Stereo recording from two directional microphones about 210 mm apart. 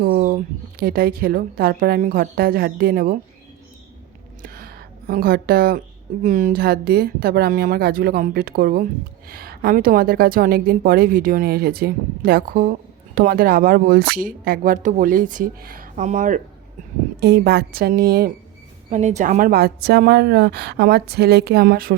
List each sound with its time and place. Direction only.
0.0 s a woman's voice: 45° right (ahead or behind)
4.4 s a sound: 45° right (ahead or behind)
6.2 s a woman's voice: 40° right (ahead or behind)
17.2 s a woman's voice: 50° right (ahead or behind)
18.9 s a woman's voice: 35° right (ahead or behind)